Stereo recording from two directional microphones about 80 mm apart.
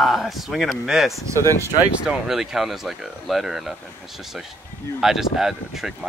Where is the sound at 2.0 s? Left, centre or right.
Centre.